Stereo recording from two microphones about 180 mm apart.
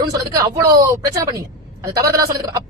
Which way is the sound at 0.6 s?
20° right (ahead or behind).